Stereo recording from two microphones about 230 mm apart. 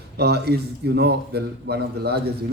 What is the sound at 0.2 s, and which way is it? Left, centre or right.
Speech, right.